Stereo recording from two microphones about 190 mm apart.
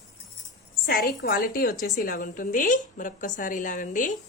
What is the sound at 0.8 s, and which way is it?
A woman's voice, 50° left (ahead or behind).